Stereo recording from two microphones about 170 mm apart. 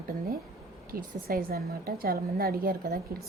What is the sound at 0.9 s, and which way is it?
Speech, 60° right (ahead or behind).